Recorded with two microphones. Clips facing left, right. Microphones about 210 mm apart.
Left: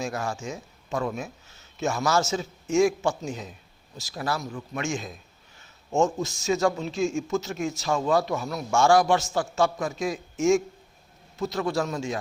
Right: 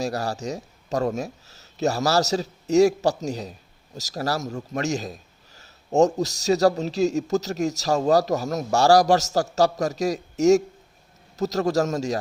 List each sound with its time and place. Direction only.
0.0 s a man's voice: 35° right (ahead or behind)